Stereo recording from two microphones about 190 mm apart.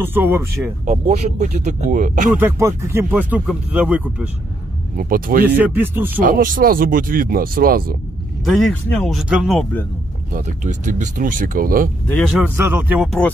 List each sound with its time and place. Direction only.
0.0 s speech: 10° right (ahead or behind)
0.8 s speech: 35° right (ahead or behind)
2.3 s speech: 10° right (ahead or behind)
4.9 s speech: 50° right (ahead or behind)
5.6 s speech: 10° right (ahead or behind)
6.2 s speech: 45° right (ahead or behind)
8.5 s speech: centre (ahead or behind)
10.3 s speech: 40° right (ahead or behind)
12.1 s speech: 5° left (ahead or behind)
12.5 s speech: 10° right (ahead or behind)